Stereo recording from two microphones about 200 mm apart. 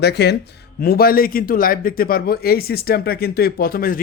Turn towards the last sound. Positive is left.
turn(degrees=45)  # may be behind; listen again after turning